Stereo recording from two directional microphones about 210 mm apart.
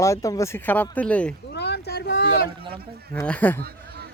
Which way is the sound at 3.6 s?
45° right (ahead or behind).